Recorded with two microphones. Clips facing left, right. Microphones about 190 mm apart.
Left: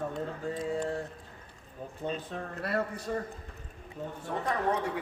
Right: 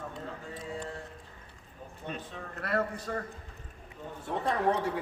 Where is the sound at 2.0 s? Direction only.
45° left (ahead or behind).